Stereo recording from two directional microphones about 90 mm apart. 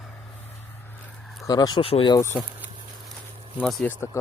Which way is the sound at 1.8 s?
90° left.